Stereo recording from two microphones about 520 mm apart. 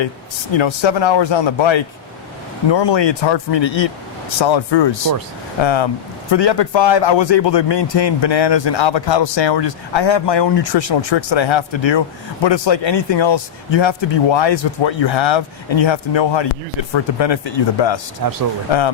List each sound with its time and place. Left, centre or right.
0.5 s a man's voice: left
18.2 s speech: right